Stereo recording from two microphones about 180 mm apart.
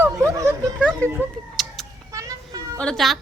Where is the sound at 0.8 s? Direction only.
10° left (ahead or behind).